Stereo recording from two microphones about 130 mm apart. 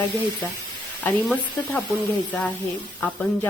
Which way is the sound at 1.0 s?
15° left (ahead or behind).